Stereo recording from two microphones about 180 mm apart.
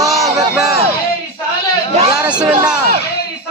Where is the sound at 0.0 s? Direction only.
20° right (ahead or behind).